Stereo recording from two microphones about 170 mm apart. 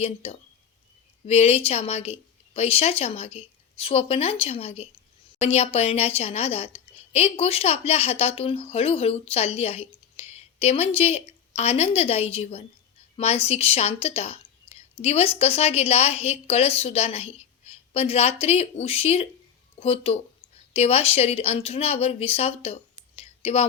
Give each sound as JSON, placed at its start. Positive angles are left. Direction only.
{"t": 0.0, "sound": "a woman's voice", "side_deg": 35}